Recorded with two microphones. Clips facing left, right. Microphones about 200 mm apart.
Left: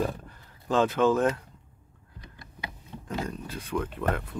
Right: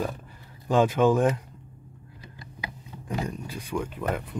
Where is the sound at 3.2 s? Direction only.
15° right (ahead or behind).